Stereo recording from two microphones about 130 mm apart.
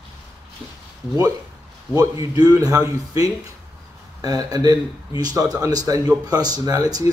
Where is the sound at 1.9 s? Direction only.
30° right (ahead or behind).